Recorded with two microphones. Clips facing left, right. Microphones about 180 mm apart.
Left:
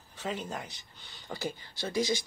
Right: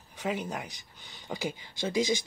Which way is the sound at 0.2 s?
10° right (ahead or behind).